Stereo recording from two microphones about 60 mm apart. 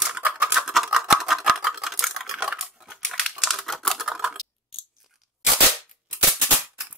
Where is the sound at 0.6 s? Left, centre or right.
Centre.